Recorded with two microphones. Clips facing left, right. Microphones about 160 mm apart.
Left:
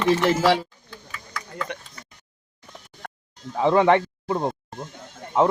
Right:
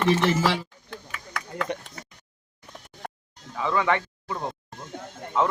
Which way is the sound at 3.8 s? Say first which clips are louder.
Left 6 dB; 25° left (ahead or behind).